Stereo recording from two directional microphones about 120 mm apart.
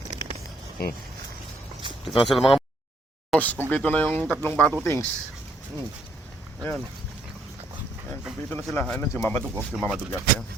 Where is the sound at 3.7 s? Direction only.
10° left (ahead or behind).